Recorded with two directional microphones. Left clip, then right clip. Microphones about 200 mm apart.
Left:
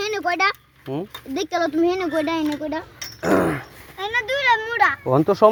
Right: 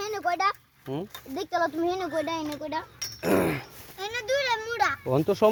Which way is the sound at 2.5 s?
40° left (ahead or behind).